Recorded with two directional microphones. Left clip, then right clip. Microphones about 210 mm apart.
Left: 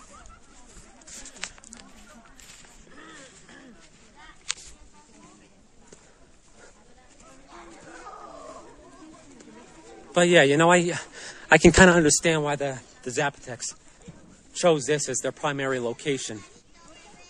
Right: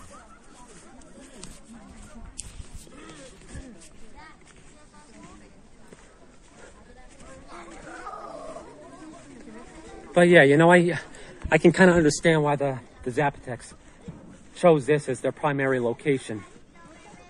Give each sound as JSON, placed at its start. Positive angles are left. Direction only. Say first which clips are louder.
{"t": 7.5, "sound": "a sound", "louder": "right 3 dB", "side_deg": -45}
{"t": 10.2, "sound": "speech", "louder": "right 2 dB", "side_deg": 10}
{"t": 11.3, "sound": "a man's voice", "louder": "left 3 dB", "side_deg": 50}
{"t": 12.2, "sound": "speech", "louder": "right 2 dB", "side_deg": 10}
{"t": 14.6, "sound": "speech", "louder": "right 2 dB", "side_deg": 10}